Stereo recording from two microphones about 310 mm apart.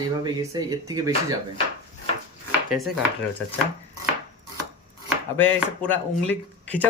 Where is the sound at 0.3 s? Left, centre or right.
Centre.